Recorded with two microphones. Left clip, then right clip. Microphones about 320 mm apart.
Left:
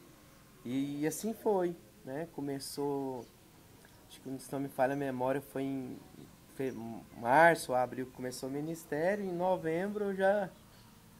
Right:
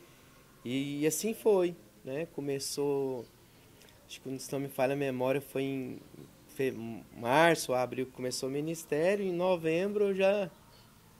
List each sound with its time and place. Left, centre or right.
0.7 s speech: right
2.7 s speech: right
4.1 s speech: right